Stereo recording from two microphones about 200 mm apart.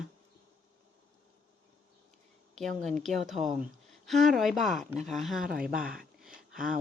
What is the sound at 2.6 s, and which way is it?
A woman's voice, centre (ahead or behind).